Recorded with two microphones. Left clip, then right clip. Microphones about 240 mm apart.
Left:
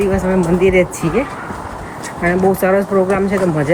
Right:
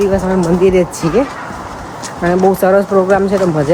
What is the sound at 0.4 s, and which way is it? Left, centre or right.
Speech, centre.